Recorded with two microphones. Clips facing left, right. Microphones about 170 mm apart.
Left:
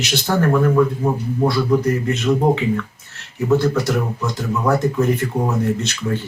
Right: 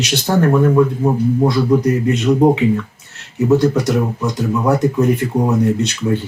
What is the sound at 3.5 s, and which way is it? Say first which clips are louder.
Speech: right 3 dB; 20° right (ahead or behind).